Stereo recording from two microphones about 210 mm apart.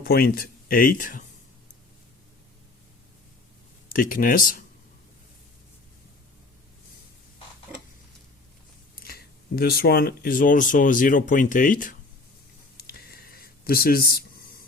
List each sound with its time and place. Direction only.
0.0 s speech: 45° left (ahead or behind)
3.8 s speech: 40° left (ahead or behind)
9.0 s speech: 45° left (ahead or behind)
12.7 s a sound: 45° left (ahead or behind)